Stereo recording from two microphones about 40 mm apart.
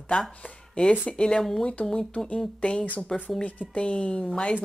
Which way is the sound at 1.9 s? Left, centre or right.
Centre.